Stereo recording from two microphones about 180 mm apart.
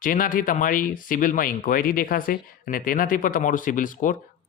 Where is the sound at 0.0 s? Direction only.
50° left (ahead or behind).